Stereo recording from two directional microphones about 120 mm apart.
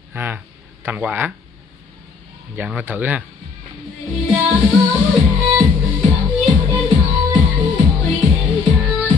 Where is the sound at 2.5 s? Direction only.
15° right (ahead or behind).